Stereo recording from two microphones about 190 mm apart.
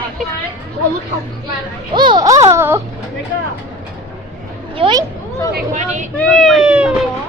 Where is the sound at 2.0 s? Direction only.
20° right (ahead or behind).